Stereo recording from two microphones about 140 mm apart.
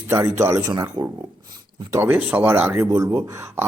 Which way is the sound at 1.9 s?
15° right (ahead or behind).